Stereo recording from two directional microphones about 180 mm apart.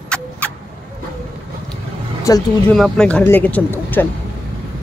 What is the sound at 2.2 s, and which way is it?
Speech, 20° left (ahead or behind).